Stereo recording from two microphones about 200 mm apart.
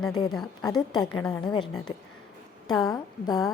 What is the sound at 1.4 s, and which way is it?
Speech, 25° left (ahead or behind).